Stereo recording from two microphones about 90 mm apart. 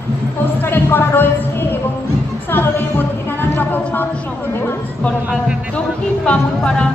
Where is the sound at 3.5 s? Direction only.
20° left (ahead or behind).